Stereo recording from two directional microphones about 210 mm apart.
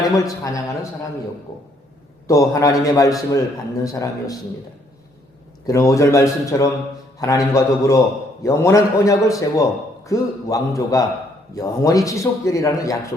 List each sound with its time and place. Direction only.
0.3 s a man's voice: 15° left (ahead or behind)
2.2 s a man's voice: 15° left (ahead or behind)
5.6 s a man's voice: 15° left (ahead or behind)